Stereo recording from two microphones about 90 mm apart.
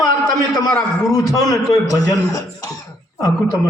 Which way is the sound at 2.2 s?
45° left (ahead or behind).